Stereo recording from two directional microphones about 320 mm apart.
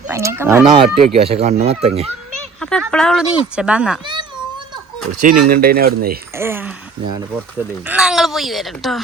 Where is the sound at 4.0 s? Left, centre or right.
Centre.